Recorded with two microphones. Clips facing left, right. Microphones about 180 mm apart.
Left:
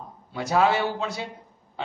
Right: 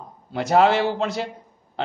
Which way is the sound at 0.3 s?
90° right.